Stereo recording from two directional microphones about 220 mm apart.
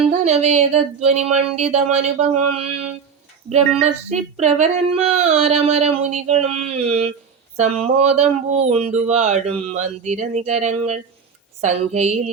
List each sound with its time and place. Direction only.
0.1 s speech: 30° right (ahead or behind)
3.5 s speech: 30° right (ahead or behind)